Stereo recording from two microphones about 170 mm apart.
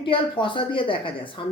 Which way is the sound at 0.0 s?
30° left (ahead or behind).